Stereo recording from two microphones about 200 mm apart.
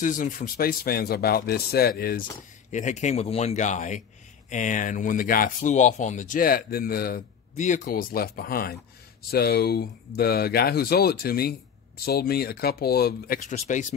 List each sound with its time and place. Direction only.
0.0 s speech: 40° left (ahead or behind)
2.7 s speech: 35° left (ahead or behind)